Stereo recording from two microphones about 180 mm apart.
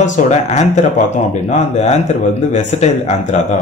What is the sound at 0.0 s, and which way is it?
Speech, 40° left (ahead or behind).